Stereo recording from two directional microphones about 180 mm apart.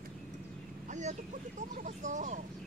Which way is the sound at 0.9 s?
40° right (ahead or behind).